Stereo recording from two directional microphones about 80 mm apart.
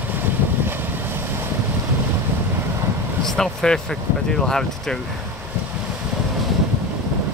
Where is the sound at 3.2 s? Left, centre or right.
Centre.